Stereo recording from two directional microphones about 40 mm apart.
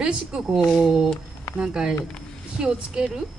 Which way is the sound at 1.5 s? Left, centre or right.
Centre.